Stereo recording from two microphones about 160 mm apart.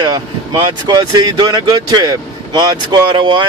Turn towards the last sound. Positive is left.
turn(degrees=-30)  # may be behind; listen again after turning